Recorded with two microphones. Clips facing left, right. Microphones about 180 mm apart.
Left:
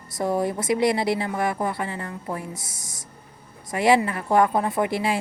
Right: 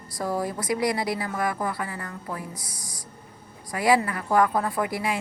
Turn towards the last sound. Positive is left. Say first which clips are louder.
# left 3 dB
turn(degrees=25)  # may be behind; listen again after turning